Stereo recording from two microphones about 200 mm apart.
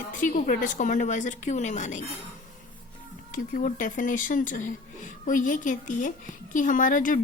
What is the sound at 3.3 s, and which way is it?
Speech, 40° left (ahead or behind).